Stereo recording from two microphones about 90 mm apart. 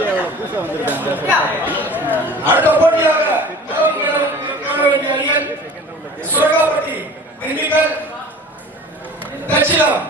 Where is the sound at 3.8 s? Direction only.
20° right (ahead or behind).